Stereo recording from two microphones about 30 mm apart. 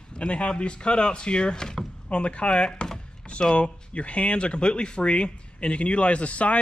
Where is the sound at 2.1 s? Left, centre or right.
Left.